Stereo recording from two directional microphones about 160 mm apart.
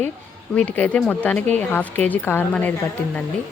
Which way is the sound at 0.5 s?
10° left (ahead or behind).